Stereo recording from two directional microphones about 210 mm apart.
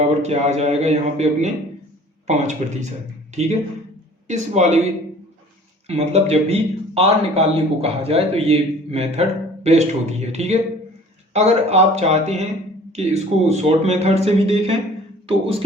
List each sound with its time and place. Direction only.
0.0 s speech: 30° right (ahead or behind)
4.3 s speech: 30° right (ahead or behind)
5.9 s a man's voice: 30° right (ahead or behind)